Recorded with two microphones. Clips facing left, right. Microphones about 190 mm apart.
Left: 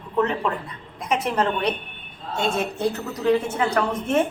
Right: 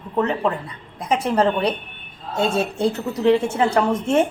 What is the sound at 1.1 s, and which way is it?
A woman's voice, 30° right (ahead or behind).